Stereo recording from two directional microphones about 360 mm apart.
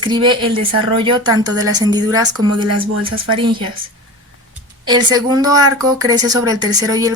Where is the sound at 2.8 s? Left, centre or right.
Centre.